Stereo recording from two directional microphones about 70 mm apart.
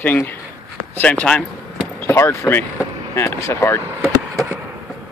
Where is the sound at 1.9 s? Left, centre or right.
Left.